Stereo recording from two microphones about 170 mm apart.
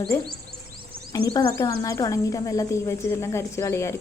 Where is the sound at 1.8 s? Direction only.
20° left (ahead or behind).